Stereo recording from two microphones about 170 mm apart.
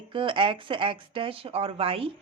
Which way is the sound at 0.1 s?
30° right (ahead or behind).